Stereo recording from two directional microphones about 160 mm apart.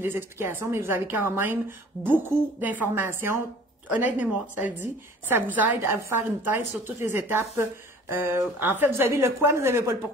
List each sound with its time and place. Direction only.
0.0 s a woman's voice: 15° right (ahead or behind)